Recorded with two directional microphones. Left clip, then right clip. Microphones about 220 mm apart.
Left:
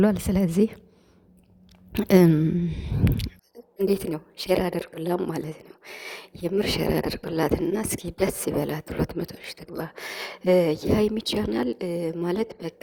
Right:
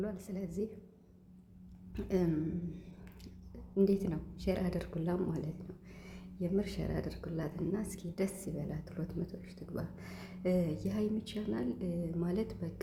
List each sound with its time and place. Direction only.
0.0 s speech: 40° left (ahead or behind)
1.9 s speech: 40° left (ahead or behind)